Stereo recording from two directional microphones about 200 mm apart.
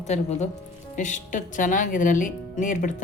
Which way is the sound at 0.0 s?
35° left (ahead or behind).